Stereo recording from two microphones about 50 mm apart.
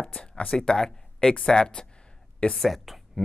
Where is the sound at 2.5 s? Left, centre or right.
Centre.